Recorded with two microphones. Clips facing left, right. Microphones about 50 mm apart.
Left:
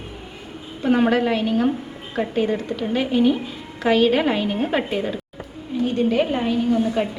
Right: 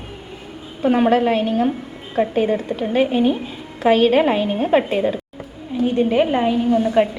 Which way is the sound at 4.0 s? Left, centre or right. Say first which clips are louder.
Right 2 dB; right.